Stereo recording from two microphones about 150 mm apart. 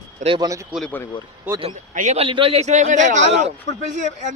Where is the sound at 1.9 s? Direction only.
60° right (ahead or behind).